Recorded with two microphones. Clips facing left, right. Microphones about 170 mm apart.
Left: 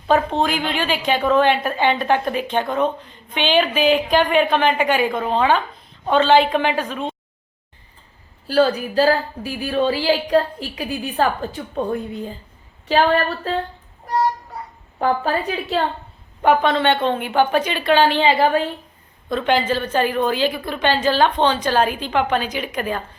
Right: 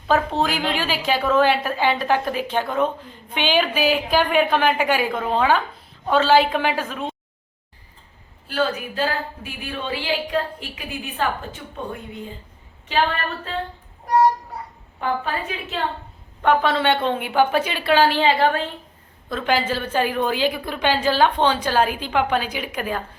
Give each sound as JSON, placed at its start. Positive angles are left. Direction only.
{"t": 0.1, "sound": "a woman's voice", "side_deg": -5}
{"t": 8.4, "sound": "a woman's voice", "side_deg": 35}
{"t": 14.9, "sound": "a woman's voice", "side_deg": 35}
{"t": 16.4, "sound": "a woman's voice", "side_deg": 5}